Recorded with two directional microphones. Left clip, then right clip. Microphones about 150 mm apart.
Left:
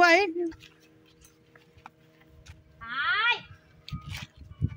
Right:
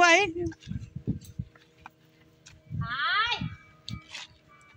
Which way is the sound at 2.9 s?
30° left (ahead or behind).